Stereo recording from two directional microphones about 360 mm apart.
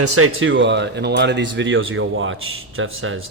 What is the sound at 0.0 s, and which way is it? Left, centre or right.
Speech, right.